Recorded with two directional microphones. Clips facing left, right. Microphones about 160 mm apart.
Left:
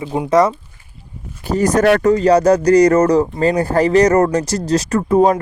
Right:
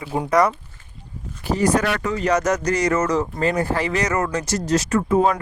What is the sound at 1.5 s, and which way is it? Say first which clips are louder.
A man's voice: left 7 dB; 45° left (ahead or behind).